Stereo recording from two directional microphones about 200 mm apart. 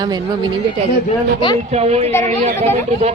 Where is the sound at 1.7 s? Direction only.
30° right (ahead or behind).